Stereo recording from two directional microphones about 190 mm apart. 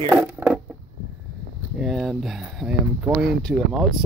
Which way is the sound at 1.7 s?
Centre (ahead or behind).